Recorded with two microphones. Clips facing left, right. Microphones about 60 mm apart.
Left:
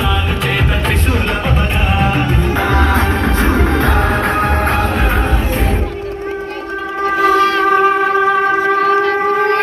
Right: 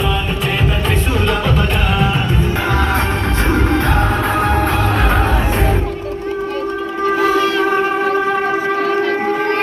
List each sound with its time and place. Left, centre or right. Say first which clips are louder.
3.9 s music: left 1 dB; left
4.3 s music: left 1 dB; left
4.8 s music: even; centre
7.3 s music: left 3 dB; left
8.8 s civil defense siren: left 3 dB; left